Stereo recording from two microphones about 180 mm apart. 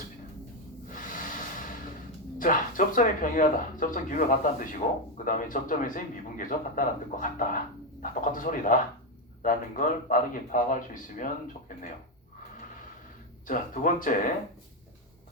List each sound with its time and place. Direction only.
0.9 s snort: 50° left (ahead or behind)
2.4 s speech: 50° left (ahead or behind)
13.5 s speech: 45° left (ahead or behind)